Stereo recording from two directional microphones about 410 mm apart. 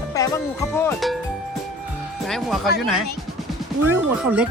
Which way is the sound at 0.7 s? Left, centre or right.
Centre.